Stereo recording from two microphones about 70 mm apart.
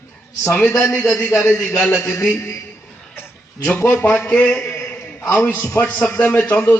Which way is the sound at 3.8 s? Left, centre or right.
Left.